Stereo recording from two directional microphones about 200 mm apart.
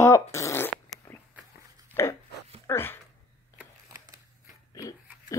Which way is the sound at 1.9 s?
15° left (ahead or behind).